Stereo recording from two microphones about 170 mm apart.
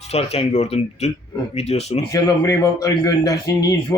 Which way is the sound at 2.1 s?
20° left (ahead or behind).